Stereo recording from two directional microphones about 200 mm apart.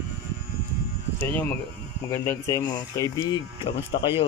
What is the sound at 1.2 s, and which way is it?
Speech, 10° left (ahead or behind).